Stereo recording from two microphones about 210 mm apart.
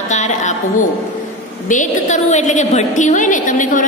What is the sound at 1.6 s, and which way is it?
A woman's voice, 35° left (ahead or behind).